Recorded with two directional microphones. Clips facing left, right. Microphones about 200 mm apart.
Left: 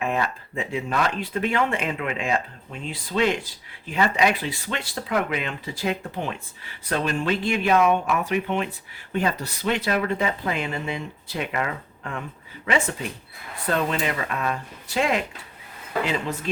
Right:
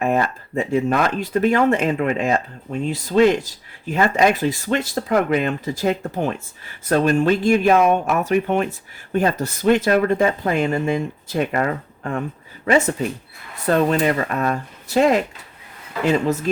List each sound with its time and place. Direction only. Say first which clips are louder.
0.0 s speech: right 6 dB; 45° right (ahead or behind)